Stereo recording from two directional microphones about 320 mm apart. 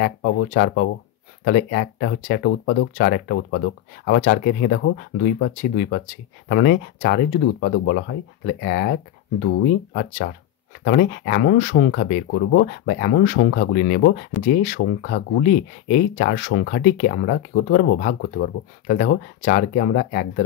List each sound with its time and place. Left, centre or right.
0.0 s speech: left
9.9 s speech: left
14.3 s speech: centre
14.8 s speech: left